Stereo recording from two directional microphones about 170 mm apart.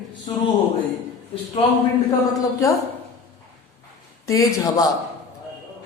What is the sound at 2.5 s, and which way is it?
Speech, 20° left (ahead or behind).